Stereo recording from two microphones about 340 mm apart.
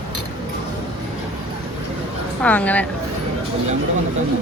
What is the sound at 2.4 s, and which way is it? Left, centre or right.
Speech, centre.